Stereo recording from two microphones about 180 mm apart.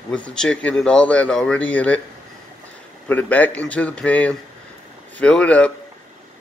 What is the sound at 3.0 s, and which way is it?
A man's voice, 10° left (ahead or behind).